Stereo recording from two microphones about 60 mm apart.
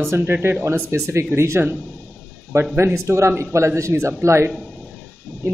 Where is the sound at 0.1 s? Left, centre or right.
Right.